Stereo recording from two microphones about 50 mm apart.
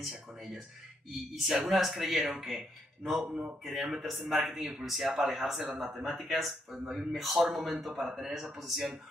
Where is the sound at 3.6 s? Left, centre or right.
Centre.